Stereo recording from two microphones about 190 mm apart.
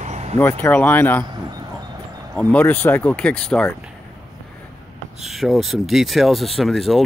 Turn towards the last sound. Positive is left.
turn(degrees=0)  # may be behind; listen again after turning